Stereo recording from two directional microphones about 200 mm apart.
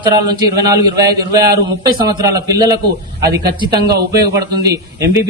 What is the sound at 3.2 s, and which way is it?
A man's voice, 50° right (ahead or behind).